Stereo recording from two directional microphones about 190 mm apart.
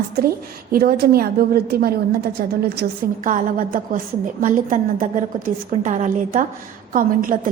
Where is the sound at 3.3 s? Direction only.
45° right (ahead or behind).